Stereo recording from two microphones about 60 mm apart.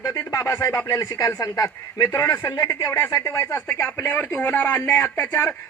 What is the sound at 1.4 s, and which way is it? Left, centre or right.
Speech, left.